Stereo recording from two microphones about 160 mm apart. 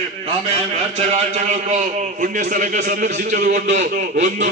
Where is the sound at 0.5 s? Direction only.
45° right (ahead or behind).